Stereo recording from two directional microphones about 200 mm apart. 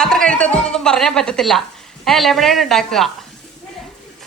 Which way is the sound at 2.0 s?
Centre (ahead or behind).